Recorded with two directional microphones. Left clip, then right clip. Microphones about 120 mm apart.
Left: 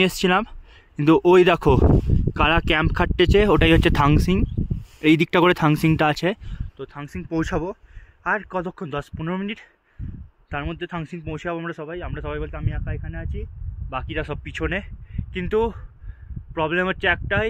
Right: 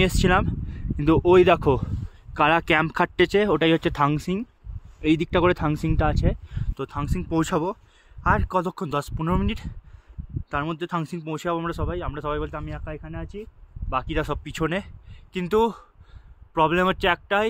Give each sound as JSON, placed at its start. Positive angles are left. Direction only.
{"t": 0.0, "sound": "a sound", "side_deg": 25}
{"t": 1.0, "sound": "speech", "side_deg": 45}
{"t": 2.3, "sound": "speech", "side_deg": 20}
{"t": 3.4, "sound": "speech", "side_deg": 45}
{"t": 5.0, "sound": "speech", "side_deg": 70}
{"t": 7.1, "sound": "speech", "side_deg": -35}
{"t": 14.4, "sound": "speech", "side_deg": -35}